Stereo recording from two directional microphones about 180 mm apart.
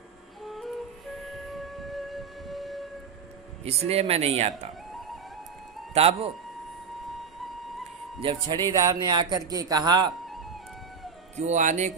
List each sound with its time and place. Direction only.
0.4 s flute: centre (ahead or behind)
1.2 s music: centre (ahead or behind)
3.6 s speech: 35° right (ahead or behind)
5.9 s speech: 35° right (ahead or behind)
8.2 s speech: 30° right (ahead or behind)
10.2 s music: centre (ahead or behind)
11.3 s speech: 40° right (ahead or behind)